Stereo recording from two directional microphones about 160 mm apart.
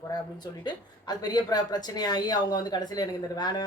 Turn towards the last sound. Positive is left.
turn(degrees=25)  # may be behind; listen again after turning